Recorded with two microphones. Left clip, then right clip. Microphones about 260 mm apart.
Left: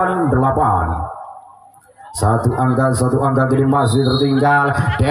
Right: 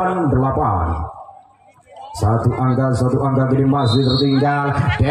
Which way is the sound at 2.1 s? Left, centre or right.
Left.